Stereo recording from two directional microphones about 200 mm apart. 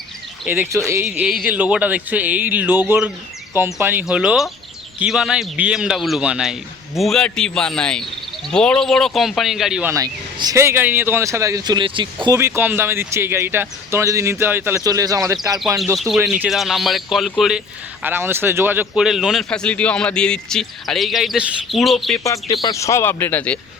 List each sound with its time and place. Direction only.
0.4 s speech: 10° right (ahead or behind)
9.9 s speech: 20° right (ahead or behind)
12.4 s speech: 10° right (ahead or behind)
16.0 s speech: centre (ahead or behind)
22.4 s speech: 20° left (ahead or behind)